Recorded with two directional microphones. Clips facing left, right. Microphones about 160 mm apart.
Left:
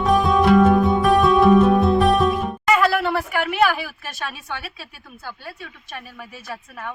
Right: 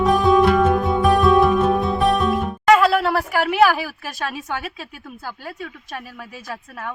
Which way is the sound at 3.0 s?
35° right (ahead or behind).